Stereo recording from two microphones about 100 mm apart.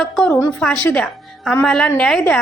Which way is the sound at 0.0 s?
10° left (ahead or behind).